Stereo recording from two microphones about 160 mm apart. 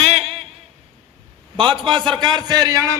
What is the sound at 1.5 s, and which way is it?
A man's voice, 30° right (ahead or behind).